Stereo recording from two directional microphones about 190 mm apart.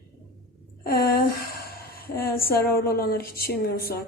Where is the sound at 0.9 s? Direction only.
55° left (ahead or behind).